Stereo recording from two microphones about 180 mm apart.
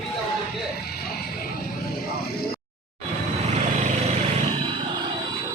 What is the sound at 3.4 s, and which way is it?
Vehicle, 40° right (ahead or behind).